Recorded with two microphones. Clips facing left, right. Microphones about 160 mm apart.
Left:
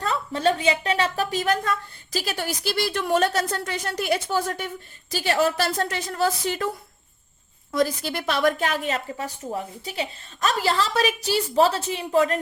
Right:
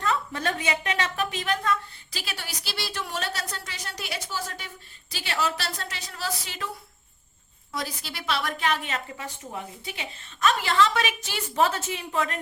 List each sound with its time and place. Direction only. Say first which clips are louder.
0.0 s a woman's voice: left 5 dB; 30° left (ahead or behind); by 6.7 s 50° left (ahead or behind)
7.7 s a woman's voice: left 11 dB; 50° left (ahead or behind)